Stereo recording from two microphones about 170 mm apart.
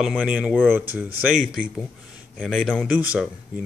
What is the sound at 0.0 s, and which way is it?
A man's voice, 5° right (ahead or behind).